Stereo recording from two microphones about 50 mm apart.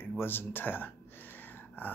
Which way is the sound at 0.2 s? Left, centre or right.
Left.